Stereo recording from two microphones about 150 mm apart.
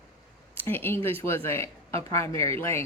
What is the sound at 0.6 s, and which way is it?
Speech, 15° left (ahead or behind).